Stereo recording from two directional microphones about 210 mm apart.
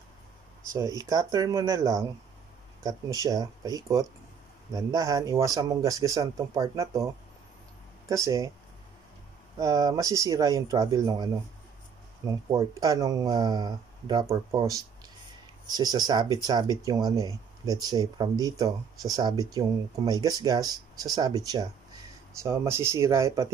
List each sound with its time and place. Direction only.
0.7 s speech: 15° right (ahead or behind)
8.1 s speech: 15° right (ahead or behind)
9.6 s speech: 15° right (ahead or behind)
12.3 s speech: 15° right (ahead or behind)
15.6 s speech: 20° right (ahead or behind)